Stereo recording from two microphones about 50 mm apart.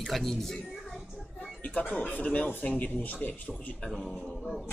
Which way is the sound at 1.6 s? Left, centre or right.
Left.